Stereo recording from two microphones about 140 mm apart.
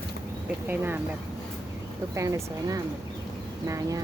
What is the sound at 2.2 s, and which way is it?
A woman's voice, 25° right (ahead or behind).